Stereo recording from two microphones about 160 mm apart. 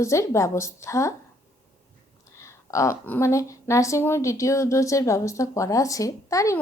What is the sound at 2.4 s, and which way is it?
A woman's voice, 20° left (ahead or behind).